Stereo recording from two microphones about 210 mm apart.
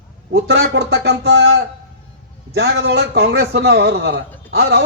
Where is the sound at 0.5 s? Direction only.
55° right (ahead or behind).